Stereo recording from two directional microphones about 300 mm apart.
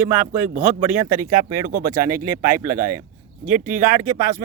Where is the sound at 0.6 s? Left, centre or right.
Centre.